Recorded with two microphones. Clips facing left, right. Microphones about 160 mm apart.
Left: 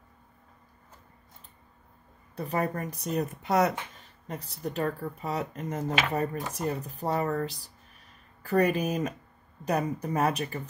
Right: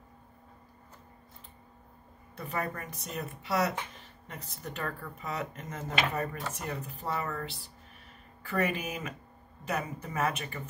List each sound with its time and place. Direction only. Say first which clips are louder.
2.3 s speech: left 6 dB; 35° left (ahead or behind)
4.3 s speech: left 7 dB; 35° left (ahead or behind)